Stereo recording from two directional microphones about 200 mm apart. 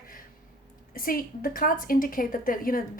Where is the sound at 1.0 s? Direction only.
45° left (ahead or behind).